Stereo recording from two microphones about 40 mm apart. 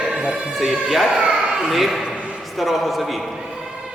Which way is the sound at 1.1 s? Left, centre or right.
Centre.